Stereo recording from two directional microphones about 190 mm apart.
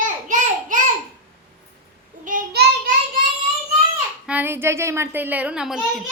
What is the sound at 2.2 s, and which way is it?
Child singing, 50° right (ahead or behind).